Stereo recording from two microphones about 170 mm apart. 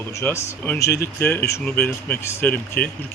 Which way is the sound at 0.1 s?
15° left (ahead or behind).